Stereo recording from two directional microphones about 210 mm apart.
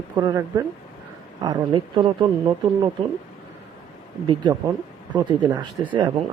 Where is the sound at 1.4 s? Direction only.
20° right (ahead or behind).